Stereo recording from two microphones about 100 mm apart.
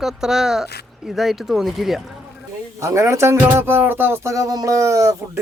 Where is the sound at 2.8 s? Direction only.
30° right (ahead or behind).